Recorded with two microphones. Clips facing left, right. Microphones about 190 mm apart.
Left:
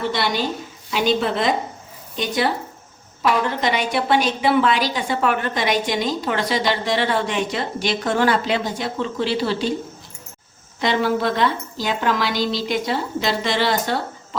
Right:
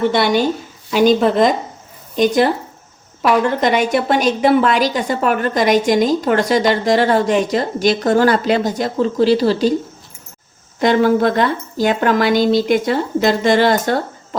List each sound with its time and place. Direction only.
0.1 s a woman's voice: 55° right (ahead or behind)
3.6 s a woman's voice: 45° right (ahead or behind)
10.8 s a woman's voice: 50° right (ahead or behind)